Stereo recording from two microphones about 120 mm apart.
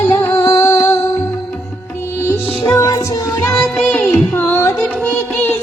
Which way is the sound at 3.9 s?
15° left (ahead or behind).